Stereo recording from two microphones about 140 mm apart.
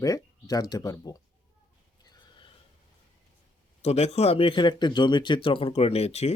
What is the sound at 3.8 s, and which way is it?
Speech, 50° left (ahead or behind).